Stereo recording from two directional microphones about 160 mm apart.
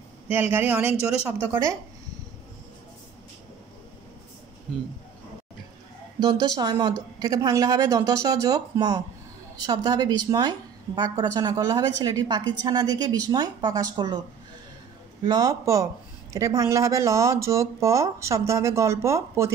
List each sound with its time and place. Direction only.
0.3 s speech: 15° right (ahead or behind)
6.1 s a woman's voice: 25° right (ahead or behind)
15.2 s a woman's voice: 25° right (ahead or behind)